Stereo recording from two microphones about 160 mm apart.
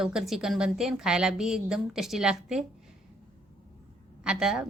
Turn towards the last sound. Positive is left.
turn(degrees=-5)  # may be behind; listen again after turning